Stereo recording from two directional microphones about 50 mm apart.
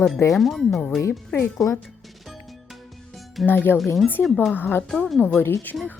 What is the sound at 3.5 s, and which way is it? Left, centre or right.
Speech, left.